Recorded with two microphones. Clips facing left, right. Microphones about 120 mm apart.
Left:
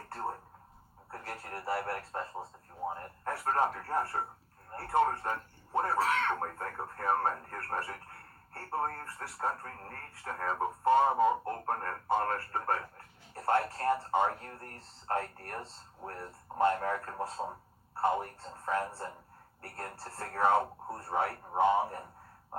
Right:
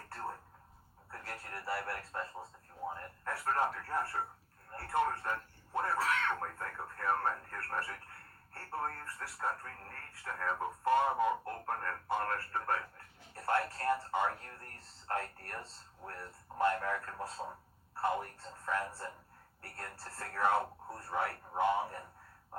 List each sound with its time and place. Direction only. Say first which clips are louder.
0.1 s telephone: left 5 dB; 30° left (ahead or behind)
1.1 s speech: left 4 dB; 30° left (ahead or behind)
2.1 s radio: left 3 dB; 30° left (ahead or behind)
3.4 s a man's voice: left 3 dB; 30° left (ahead or behind)
8.8 s speech: left 4 dB; 40° left (ahead or behind)
9.4 s speech: left 4 dB; 30° left (ahead or behind)
11.6 s a sound: left 4 dB; 35° left (ahead or behind)
12.5 s speech: left 3 dB; 25° left (ahead or behind)